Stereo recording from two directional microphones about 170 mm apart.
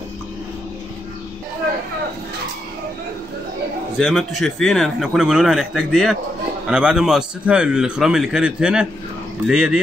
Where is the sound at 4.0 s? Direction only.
Centre (ahead or behind).